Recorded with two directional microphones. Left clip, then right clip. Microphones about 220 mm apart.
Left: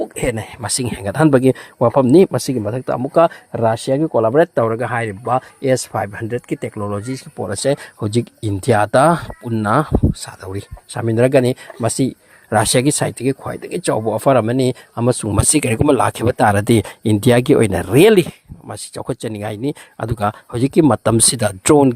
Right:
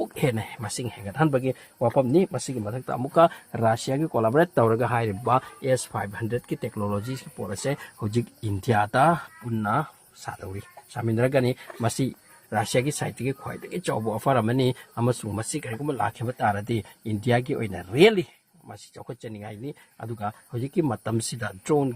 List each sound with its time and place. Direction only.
0.0 s speech: 20° left (ahead or behind)
0.6 s speech: 50° left (ahead or behind)
2.6 s speech: 30° left (ahead or behind); by 5.4 s 5° left (ahead or behind)
5.6 s speech: 35° left (ahead or behind)
12.5 s speech: 50° left (ahead or behind); by 15.3 s 35° left (ahead or behind)
15.3 s speech: 55° left (ahead or behind)